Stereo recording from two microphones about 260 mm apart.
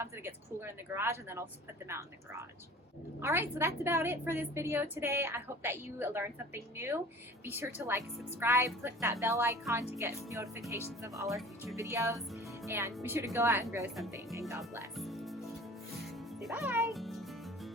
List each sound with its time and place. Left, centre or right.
0.0 s a woman's voice: centre
11.3 s speech: centre
11.8 s a woman's voice: centre
16.0 s music: centre